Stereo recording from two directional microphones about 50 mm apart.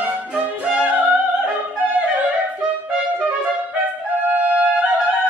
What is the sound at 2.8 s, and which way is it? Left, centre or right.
Music, right.